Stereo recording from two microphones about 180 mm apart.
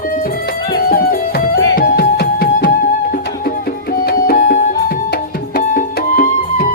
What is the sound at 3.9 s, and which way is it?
Music, 50° left (ahead or behind).